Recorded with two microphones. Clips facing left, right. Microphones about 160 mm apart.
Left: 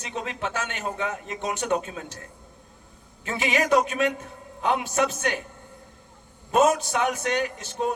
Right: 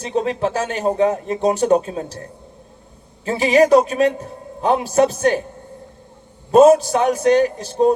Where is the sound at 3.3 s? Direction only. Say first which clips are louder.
Right 10 dB; 35° right (ahead or behind).